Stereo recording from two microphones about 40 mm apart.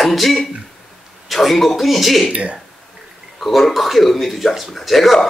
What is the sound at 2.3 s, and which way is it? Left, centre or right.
Speech, right.